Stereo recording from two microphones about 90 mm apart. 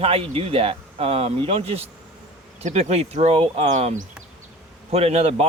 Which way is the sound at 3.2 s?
90° right.